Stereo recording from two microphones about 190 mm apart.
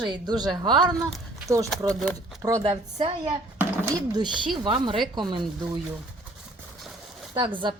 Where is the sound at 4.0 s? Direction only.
25° right (ahead or behind).